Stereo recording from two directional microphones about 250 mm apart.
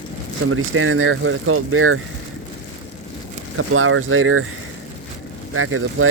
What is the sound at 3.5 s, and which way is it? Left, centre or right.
Speech, right.